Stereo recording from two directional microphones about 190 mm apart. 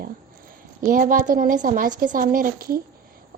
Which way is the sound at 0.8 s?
45° right (ahead or behind).